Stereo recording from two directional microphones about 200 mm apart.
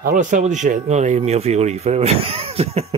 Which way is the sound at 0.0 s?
40° right (ahead or behind).